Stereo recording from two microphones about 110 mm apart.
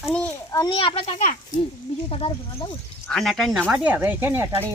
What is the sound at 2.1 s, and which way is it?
Speech, 60° left (ahead or behind).